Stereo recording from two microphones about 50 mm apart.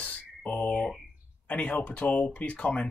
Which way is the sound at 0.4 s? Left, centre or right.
Left.